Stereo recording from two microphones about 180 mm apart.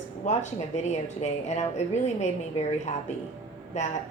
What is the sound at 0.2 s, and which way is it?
A woman's voice, 40° left (ahead or behind).